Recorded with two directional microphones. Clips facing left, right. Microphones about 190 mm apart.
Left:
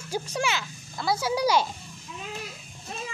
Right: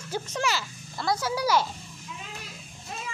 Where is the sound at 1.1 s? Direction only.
15° left (ahead or behind).